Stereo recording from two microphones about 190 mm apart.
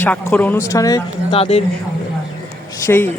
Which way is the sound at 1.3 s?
30° left (ahead or behind).